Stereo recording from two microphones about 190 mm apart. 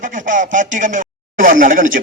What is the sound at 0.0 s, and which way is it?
Speech, 40° right (ahead or behind).